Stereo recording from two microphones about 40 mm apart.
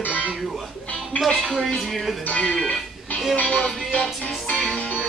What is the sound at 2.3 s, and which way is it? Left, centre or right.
Music, left.